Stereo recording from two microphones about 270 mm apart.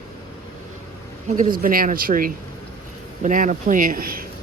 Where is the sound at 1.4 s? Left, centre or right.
Right.